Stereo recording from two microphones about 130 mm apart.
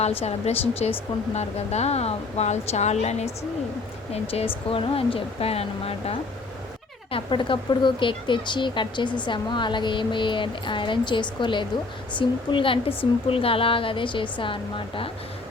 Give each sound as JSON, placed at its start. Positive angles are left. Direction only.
{"t": 0.0, "sound": "a woman's voice", "side_deg": 50}
{"t": 7.1, "sound": "a woman's voice", "side_deg": 40}